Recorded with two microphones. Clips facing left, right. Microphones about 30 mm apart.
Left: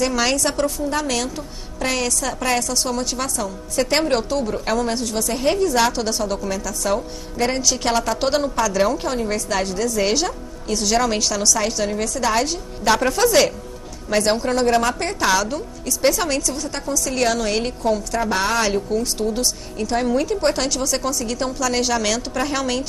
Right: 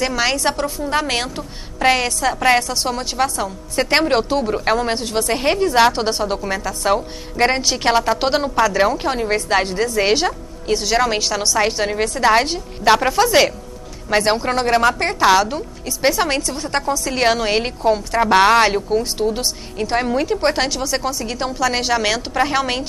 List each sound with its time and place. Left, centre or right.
0.0 s a woman's voice: centre
0.8 s a woman's voice: right
18.7 s a woman's voice: right